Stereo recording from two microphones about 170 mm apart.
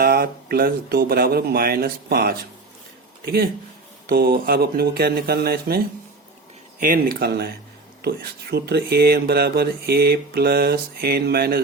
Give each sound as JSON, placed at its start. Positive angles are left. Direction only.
{"t": 0.0, "sound": "speech", "side_deg": -60}
{"t": 4.1, "sound": "speech", "side_deg": -65}